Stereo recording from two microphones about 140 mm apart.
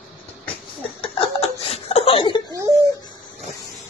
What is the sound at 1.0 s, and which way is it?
Laughter, 45° left (ahead or behind).